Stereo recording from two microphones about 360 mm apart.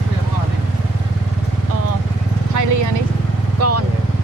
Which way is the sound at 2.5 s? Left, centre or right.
Right.